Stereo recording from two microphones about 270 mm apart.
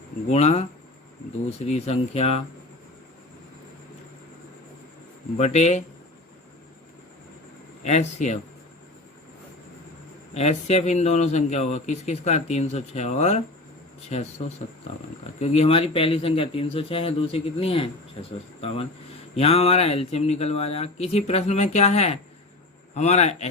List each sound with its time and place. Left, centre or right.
0.3 s a man's voice: left
1.6 s a man's voice: left
5.4 s a man's voice: left
7.9 s a man's voice: left
10.3 s a man's voice: left
15.4 s a man's voice: left